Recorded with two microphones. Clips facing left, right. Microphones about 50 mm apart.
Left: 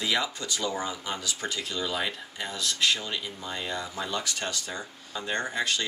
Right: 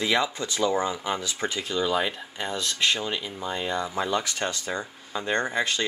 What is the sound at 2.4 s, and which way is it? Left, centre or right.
Speech, right.